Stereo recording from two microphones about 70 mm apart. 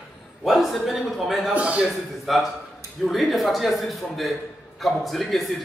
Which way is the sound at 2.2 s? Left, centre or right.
Centre.